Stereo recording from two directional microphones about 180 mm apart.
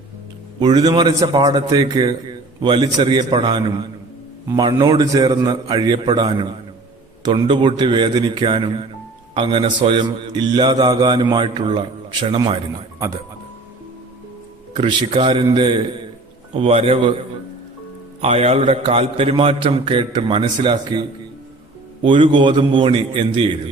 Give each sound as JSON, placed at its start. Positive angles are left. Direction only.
{"t": 0.6, "sound": "a man's voice", "side_deg": -25}
{"t": 14.8, "sound": "a man's voice", "side_deg": -30}
{"t": 18.2, "sound": "a man's voice", "side_deg": -35}
{"t": 22.0, "sound": "a man's voice", "side_deg": -30}